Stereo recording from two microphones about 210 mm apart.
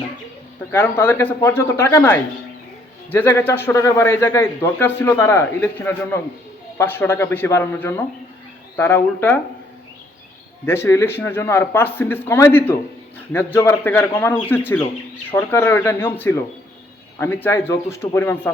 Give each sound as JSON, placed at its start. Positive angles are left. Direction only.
{"t": 0.7, "sound": "a man's voice", "side_deg": 10}
{"t": 10.7, "sound": "a man's voice", "side_deg": 10}